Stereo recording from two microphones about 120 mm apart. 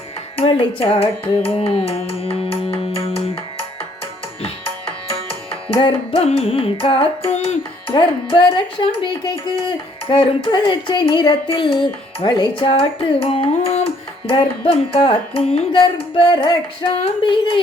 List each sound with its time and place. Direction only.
0.3 s female singing: 55° left (ahead or behind)
1.6 s music: 55° left (ahead or behind)
15.7 s female singing: 45° left (ahead or behind)